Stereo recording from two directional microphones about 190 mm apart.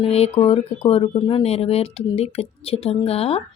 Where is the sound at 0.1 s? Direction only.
30° left (ahead or behind).